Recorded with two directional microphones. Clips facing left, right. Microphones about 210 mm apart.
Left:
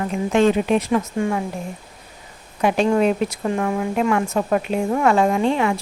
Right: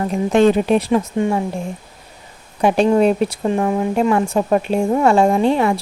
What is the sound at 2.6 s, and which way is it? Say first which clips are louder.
A woman's voice: right 4 dB; 35° right (ahead or behind).